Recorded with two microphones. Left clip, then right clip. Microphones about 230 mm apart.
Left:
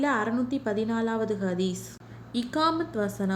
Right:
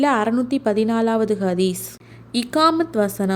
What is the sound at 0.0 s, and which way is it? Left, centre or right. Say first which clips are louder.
A woman's voice: right 8 dB; right.